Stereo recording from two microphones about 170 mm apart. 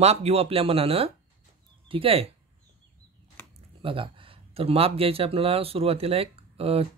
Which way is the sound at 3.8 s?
30° right (ahead or behind).